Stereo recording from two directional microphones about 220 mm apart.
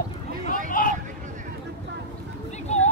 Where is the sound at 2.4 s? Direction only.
30° left (ahead or behind).